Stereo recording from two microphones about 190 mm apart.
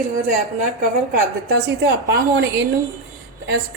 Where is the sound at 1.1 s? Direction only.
55° right (ahead or behind).